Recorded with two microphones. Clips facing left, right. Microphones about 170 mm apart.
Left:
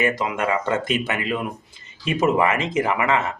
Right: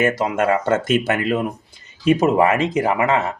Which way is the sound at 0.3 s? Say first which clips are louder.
Right 5 dB; 45° right (ahead or behind).